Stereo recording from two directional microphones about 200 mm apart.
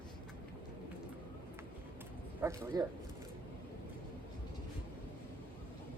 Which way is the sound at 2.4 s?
10° right (ahead or behind).